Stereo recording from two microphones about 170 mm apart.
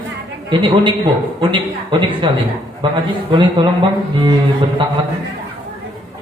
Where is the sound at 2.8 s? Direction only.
30° right (ahead or behind).